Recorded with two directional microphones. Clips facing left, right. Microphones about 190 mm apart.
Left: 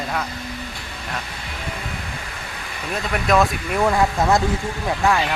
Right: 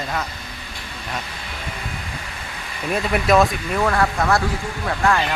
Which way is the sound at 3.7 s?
15° left (ahead or behind).